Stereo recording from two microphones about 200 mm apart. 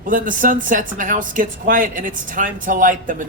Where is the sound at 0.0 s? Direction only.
40° right (ahead or behind).